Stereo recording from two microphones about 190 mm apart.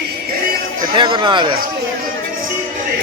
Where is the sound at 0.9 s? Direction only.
25° right (ahead or behind).